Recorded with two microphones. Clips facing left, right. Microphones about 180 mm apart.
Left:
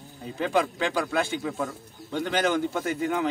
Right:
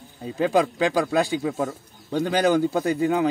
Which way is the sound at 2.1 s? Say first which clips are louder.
Right 5 dB; 40° right (ahead or behind).